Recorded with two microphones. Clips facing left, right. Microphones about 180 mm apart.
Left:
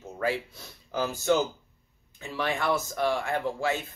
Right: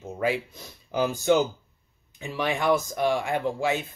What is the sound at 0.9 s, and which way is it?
Speech, 15° right (ahead or behind).